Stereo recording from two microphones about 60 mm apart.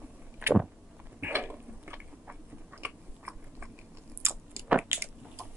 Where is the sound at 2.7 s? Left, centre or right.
Right.